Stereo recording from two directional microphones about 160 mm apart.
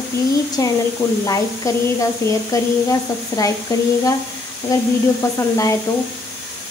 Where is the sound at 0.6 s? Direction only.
20° left (ahead or behind).